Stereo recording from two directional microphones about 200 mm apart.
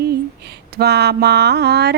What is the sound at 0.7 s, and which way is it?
Mantra, 55° right (ahead or behind).